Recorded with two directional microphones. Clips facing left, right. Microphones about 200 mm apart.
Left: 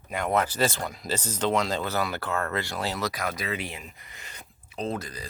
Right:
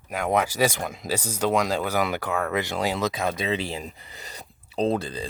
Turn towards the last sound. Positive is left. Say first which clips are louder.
# right 7 dB
turn(degrees=-30)  # may be behind; listen again after turning